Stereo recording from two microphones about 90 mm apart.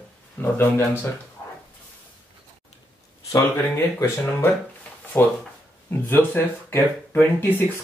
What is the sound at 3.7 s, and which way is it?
Speech, 25° left (ahead or behind).